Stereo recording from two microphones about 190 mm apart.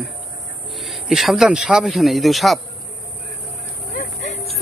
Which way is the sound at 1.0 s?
Centre (ahead or behind).